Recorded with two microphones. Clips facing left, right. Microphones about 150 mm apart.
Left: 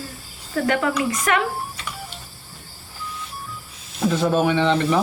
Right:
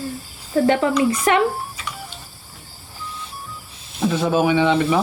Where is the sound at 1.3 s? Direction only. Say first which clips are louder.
Right 3 dB; 30° right (ahead or behind).